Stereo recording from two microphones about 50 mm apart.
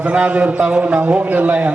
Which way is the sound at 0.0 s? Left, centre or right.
Right.